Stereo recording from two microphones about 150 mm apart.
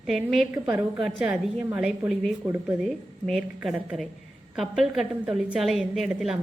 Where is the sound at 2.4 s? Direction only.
15° right (ahead or behind).